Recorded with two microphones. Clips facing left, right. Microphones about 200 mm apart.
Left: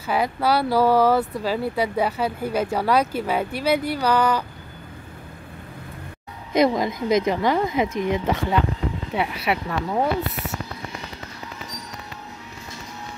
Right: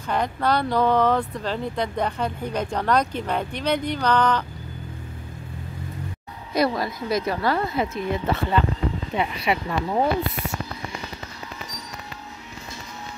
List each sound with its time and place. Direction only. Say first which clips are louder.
0.0 s speech: left 2 dB; 5° left (ahead or behind)
6.5 s speech: left 4 dB; 20° left (ahead or behind); by 10.0 s centre (ahead or behind)